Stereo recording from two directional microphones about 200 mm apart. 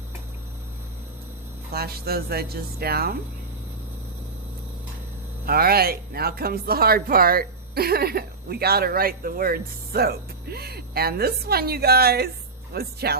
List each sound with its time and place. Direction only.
1.7 s speech: 50° right (ahead or behind)
5.5 s speech: 50° right (ahead or behind)